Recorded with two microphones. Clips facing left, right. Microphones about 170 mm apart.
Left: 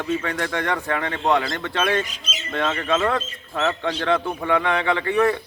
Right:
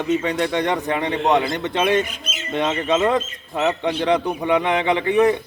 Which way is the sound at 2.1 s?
55° right (ahead or behind).